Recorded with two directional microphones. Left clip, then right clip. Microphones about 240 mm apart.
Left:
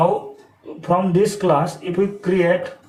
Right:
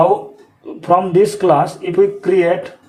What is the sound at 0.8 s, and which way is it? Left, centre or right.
Speech, right.